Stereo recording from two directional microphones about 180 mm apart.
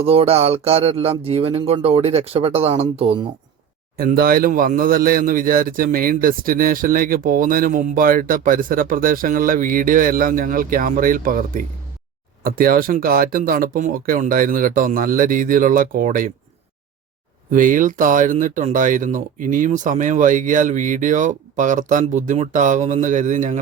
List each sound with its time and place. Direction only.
0.0 s speech: 35° right (ahead or behind)
3.9 s a man's voice: 55° right (ahead or behind)
17.5 s a man's voice: 45° right (ahead or behind)